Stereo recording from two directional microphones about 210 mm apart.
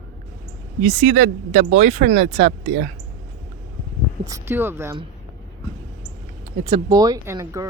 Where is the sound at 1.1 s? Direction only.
30° right (ahead or behind).